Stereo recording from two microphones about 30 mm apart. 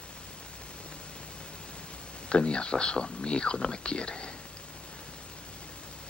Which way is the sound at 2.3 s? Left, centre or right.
Left.